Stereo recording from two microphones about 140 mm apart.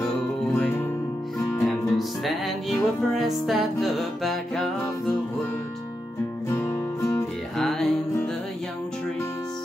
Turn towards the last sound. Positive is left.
turn(degrees=0)  # may be behind; listen again after turning